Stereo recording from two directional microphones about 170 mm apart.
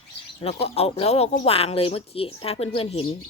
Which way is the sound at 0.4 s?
35° left (ahead or behind).